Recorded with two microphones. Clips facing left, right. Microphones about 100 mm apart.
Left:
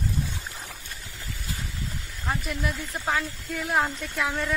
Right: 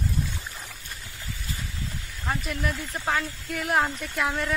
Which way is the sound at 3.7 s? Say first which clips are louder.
Right 1 dB; 10° right (ahead or behind).